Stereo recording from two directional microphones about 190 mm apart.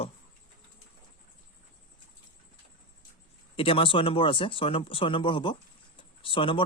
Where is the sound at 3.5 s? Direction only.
30° left (ahead or behind).